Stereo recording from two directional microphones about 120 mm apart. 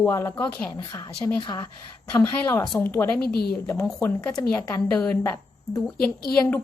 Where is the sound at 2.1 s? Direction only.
30° left (ahead or behind).